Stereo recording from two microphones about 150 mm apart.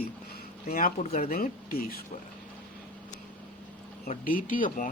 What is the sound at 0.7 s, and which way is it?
Speech, 65° left (ahead or behind).